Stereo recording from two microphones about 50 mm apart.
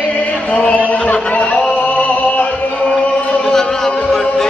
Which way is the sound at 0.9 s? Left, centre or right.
Left.